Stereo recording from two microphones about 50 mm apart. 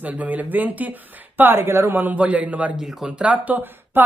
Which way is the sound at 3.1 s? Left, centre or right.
Right.